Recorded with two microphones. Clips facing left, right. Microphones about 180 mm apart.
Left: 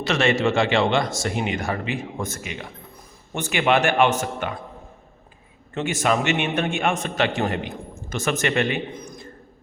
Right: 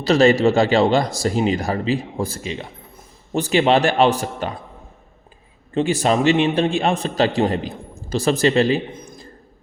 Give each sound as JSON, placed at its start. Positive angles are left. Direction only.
{"t": 0.0, "sound": "a man's voice", "side_deg": -35}
{"t": 5.7, "sound": "a man's voice", "side_deg": -30}